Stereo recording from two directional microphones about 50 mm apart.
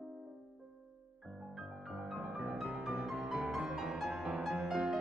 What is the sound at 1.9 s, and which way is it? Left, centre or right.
Music, centre.